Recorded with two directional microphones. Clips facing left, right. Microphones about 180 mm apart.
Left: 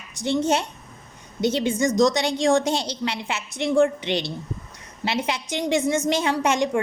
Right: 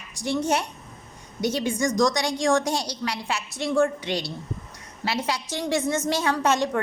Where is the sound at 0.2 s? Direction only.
25° left (ahead or behind).